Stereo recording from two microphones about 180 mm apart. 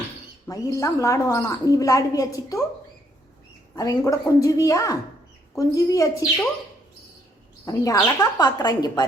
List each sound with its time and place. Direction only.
0.4 s a woman's voice: 20° left (ahead or behind)
3.8 s a woman's voice: 20° left (ahead or behind)
7.6 s speech: 20° left (ahead or behind)